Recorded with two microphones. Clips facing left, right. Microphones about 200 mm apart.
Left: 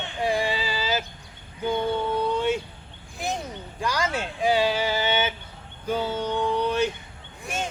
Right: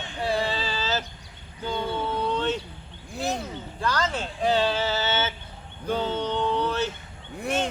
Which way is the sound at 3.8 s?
10° left (ahead or behind).